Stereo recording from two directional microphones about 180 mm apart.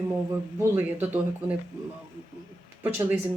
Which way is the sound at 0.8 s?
10° right (ahead or behind).